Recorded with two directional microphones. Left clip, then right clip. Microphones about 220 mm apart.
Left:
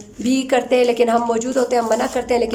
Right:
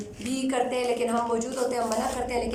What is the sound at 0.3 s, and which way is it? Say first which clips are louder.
A woman's voice: left 10 dB; 40° left (ahead or behind).